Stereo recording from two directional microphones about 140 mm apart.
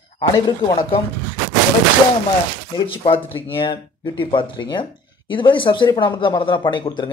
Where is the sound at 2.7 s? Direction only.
40° left (ahead or behind).